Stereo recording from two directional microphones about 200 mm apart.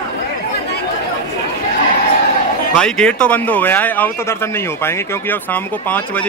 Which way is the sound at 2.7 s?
5° left (ahead or behind).